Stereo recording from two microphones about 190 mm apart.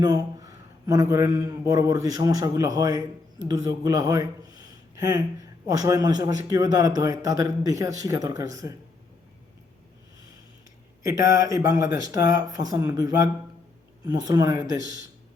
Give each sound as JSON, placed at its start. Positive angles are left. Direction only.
{"t": 0.0, "sound": "a man's voice", "side_deg": -20}
{"t": 11.0, "sound": "a man's voice", "side_deg": -15}